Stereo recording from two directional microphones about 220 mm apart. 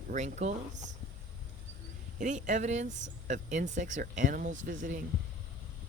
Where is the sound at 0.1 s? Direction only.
35° right (ahead or behind).